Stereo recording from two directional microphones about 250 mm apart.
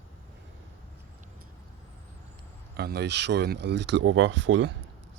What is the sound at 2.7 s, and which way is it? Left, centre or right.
Speech, right.